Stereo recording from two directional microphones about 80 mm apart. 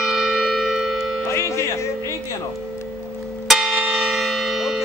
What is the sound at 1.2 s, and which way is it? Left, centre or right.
Speech, left.